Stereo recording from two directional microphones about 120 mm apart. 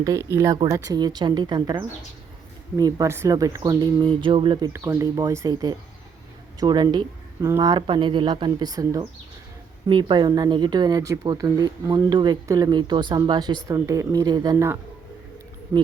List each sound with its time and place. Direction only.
0.0 s speech: 25° right (ahead or behind)
2.7 s speech: 30° right (ahead or behind)
4.0 s a sound: 45° right (ahead or behind)
4.9 s speech: 35° right (ahead or behind)
7.8 s speech: 45° right (ahead or behind)
9.9 s speech: 40° right (ahead or behind)
13.7 s speech: 25° right (ahead or behind)